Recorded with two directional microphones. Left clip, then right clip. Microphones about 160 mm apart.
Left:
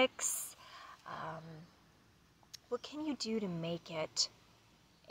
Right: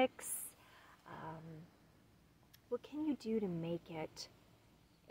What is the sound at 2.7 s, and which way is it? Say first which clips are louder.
Speech: left 1 dB; 20° right (ahead or behind).